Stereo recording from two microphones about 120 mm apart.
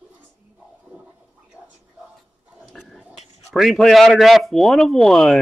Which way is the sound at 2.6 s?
Centre (ahead or behind).